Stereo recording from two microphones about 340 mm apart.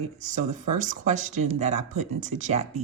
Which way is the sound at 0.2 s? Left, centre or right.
Right.